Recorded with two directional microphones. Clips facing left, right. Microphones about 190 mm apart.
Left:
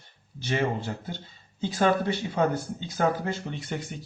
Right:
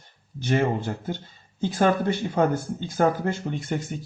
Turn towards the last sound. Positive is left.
turn(degrees=-45)  # may be behind; listen again after turning